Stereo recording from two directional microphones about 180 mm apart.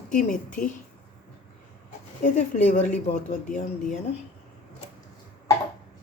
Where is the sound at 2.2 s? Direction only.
45° left (ahead or behind).